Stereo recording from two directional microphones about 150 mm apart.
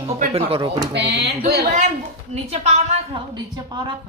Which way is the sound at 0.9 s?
90° right.